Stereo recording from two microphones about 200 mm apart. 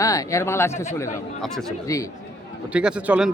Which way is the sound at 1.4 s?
Centre (ahead or behind).